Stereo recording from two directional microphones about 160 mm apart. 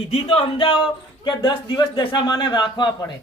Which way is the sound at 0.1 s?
35° left (ahead or behind).